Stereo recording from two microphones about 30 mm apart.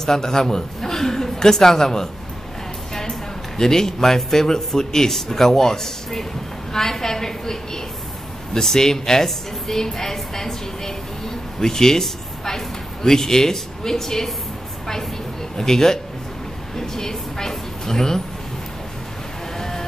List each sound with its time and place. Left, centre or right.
0.0 s a woman's voice: centre
15.5 s a woman's voice: centre